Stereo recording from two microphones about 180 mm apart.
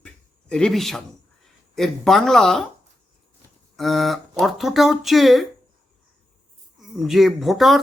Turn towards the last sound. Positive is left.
turn(degrees=0)  # may be behind; listen again after turning